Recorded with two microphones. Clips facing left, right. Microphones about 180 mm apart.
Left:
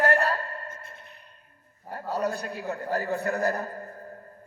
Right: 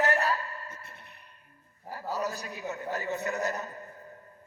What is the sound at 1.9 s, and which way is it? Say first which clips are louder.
A man's voice: left 4 dB; 60° left (ahead or behind).